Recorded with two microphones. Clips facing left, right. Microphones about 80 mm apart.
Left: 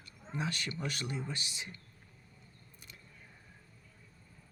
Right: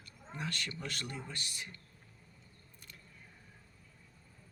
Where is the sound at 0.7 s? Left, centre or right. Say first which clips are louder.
Left 4 dB; centre.